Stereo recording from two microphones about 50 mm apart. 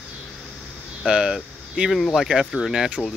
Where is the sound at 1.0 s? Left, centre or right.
Centre.